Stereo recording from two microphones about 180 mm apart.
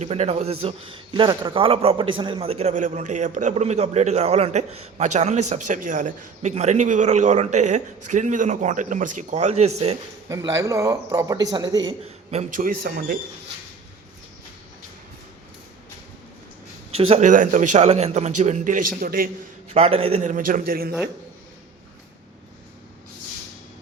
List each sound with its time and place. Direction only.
0.0 s a man's voice: 35° right (ahead or behind)
10.2 s a man's voice: 15° right (ahead or behind)
12.3 s a man's voice: 40° right (ahead or behind)
16.9 s a man's voice: 35° right (ahead or behind); by 19.3 s 55° right (ahead or behind)
19.7 s a man's voice: 35° right (ahead or behind)
20.3 s a man's voice: 50° right (ahead or behind)